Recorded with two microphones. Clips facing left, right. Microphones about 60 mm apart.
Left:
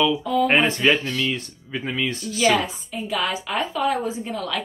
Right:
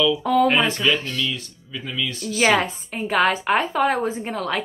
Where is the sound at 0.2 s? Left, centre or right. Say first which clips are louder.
Right 3 dB; right.